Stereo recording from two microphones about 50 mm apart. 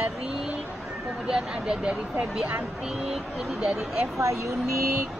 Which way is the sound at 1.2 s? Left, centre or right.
Centre.